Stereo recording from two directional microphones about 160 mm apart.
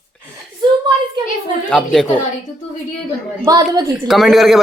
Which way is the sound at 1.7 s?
5° left (ahead or behind).